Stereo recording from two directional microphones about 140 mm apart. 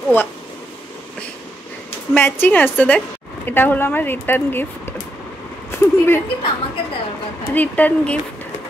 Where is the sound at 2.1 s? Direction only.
15° left (ahead or behind).